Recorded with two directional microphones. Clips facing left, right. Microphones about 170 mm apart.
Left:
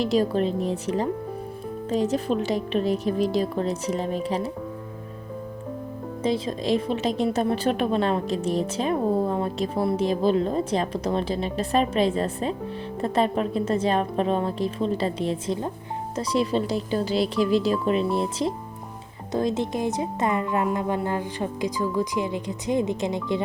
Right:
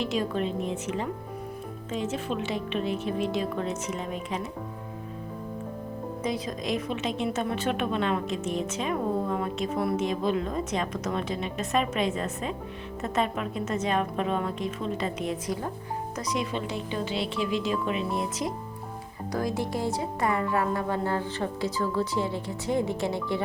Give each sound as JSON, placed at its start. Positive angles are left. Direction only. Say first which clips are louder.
{"t": 0.0, "sound": "a woman's voice", "louder": "left 6 dB", "side_deg": 35}
{"t": 6.2, "sound": "a woman's voice", "louder": "left 7 dB", "side_deg": 30}